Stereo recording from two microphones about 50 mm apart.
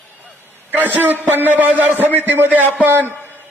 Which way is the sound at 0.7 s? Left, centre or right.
Right.